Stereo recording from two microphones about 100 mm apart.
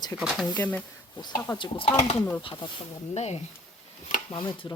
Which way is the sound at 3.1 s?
90° left.